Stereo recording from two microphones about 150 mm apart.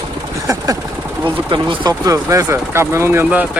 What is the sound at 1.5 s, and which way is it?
Speech, 30° right (ahead or behind).